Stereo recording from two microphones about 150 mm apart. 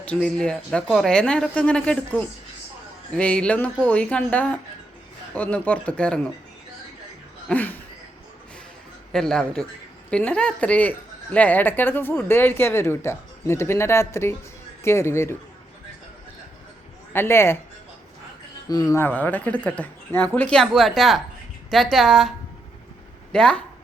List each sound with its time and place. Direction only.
0.0 s a woman's voice: 5° left (ahead or behind)
7.4 s a sound: 10° left (ahead or behind)
9.1 s a woman's voice: 5° left (ahead or behind)
17.1 s a woman's voice: 15° left (ahead or behind)
18.7 s a woman's voice: 25° left (ahead or behind); by 22.3 s centre (ahead or behind)
23.3 s speech: 5° left (ahead or behind)